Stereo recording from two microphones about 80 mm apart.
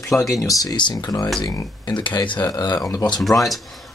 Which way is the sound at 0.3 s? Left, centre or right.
Left.